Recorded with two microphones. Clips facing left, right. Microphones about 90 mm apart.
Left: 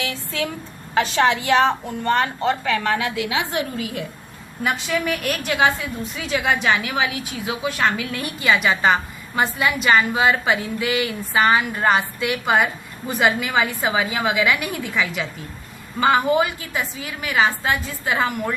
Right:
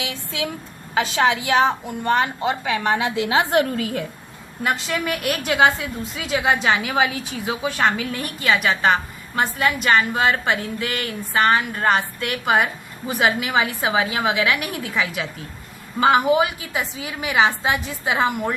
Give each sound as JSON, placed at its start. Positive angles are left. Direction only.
{"t": 0.0, "sound": "a woman's voice", "side_deg": -15}
{"t": 3.2, "sound": "a woman's voice", "side_deg": -45}
{"t": 4.6, "sound": "a woman's voice", "side_deg": 0}
{"t": 6.3, "sound": "a woman's voice", "side_deg": -25}
{"t": 8.4, "sound": "a woman's voice", "side_deg": 0}